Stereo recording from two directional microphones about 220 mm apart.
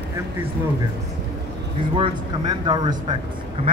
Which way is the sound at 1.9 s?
20° right (ahead or behind).